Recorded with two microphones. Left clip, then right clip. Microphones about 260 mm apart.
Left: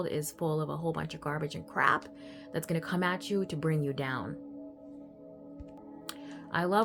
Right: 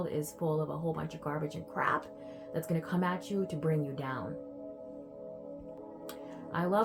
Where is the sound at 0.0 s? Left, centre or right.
Left.